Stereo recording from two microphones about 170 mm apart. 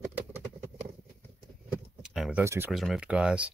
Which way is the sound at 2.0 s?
5° right (ahead or behind).